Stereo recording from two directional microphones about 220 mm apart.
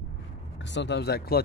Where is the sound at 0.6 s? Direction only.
55° left (ahead or behind).